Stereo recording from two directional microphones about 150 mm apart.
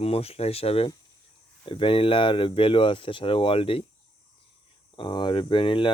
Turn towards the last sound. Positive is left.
turn(degrees=35)  # may be behind; listen again after turning